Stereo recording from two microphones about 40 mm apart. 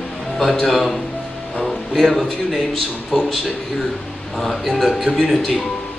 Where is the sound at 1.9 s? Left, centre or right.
Centre.